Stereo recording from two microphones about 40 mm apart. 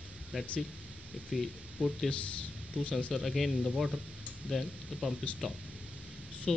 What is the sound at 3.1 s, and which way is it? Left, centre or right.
Speech, centre.